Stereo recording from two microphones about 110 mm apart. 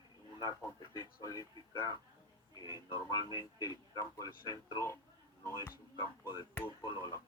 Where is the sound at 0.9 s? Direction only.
30° left (ahead or behind).